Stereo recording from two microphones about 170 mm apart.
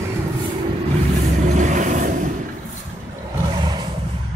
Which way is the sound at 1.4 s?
45° right (ahead or behind).